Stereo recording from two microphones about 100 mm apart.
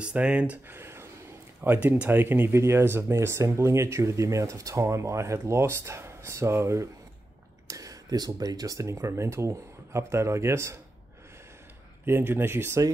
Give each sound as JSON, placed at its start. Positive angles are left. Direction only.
{"t": 0.0, "sound": "speech", "side_deg": -10}
{"t": 12.0, "sound": "speech", "side_deg": -25}